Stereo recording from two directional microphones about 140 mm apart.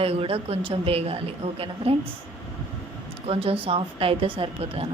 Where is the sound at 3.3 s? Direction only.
40° right (ahead or behind).